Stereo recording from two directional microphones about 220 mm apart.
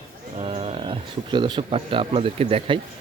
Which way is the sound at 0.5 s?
25° right (ahead or behind).